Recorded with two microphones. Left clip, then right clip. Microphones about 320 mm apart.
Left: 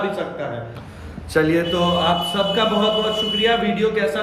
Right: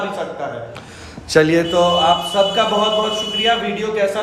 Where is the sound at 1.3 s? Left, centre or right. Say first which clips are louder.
Right 4 dB; right.